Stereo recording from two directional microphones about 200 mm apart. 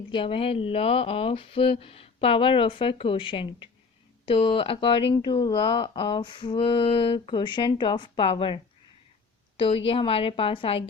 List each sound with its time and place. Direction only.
0.1 s speech: 25° left (ahead or behind)